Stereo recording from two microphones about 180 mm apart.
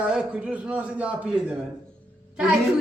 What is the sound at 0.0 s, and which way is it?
A man's voice, 5° right (ahead or behind).